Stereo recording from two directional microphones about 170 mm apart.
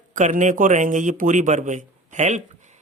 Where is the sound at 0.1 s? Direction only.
50° right (ahead or behind).